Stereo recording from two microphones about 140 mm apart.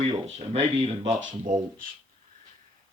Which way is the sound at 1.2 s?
80° right.